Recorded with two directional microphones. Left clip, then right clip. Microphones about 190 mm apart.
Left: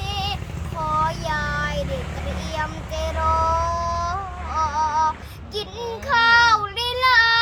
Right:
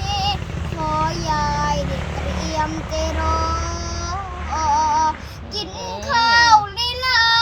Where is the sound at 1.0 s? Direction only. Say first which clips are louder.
Right 3 dB; 25° left (ahead or behind).